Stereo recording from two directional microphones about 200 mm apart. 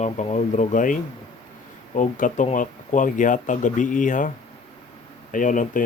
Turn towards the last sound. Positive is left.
turn(degrees=40)  # may be behind; listen again after turning